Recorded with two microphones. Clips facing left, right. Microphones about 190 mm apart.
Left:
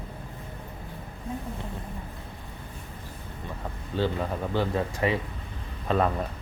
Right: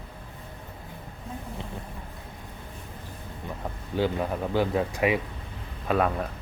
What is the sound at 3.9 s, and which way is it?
Speech, 10° right (ahead or behind).